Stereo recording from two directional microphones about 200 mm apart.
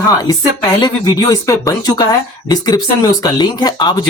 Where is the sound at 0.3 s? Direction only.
20° left (ahead or behind).